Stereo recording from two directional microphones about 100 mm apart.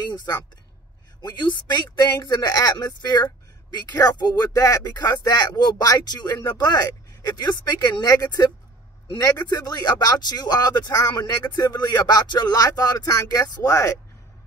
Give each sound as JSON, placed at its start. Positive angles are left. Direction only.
{"t": 0.1, "sound": "speech", "side_deg": 45}